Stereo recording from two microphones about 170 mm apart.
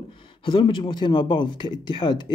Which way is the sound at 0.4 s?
30° left (ahead or behind).